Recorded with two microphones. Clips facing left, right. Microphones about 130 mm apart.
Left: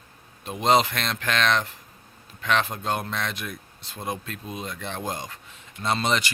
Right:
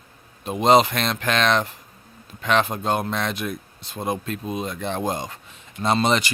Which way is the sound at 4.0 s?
30° right (ahead or behind).